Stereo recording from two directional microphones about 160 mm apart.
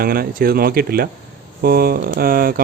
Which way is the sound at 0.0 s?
70° right (ahead or behind).